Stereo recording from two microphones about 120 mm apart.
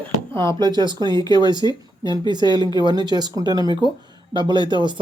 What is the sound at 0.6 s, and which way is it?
Speech, 35° right (ahead or behind).